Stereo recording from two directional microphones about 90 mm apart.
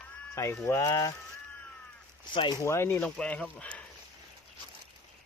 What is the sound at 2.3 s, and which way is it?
Speech, 60° left (ahead or behind).